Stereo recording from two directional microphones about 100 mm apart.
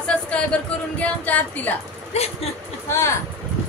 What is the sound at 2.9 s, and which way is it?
Speech, 25° left (ahead or behind).